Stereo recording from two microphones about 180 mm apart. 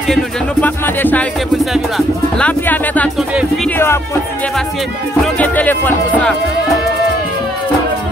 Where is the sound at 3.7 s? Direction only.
15° left (ahead or behind).